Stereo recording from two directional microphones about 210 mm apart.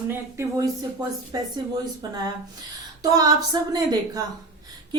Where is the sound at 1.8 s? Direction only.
20° right (ahead or behind).